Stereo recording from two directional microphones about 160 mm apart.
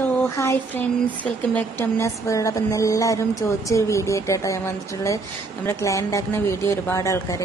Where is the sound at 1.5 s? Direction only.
15° left (ahead or behind).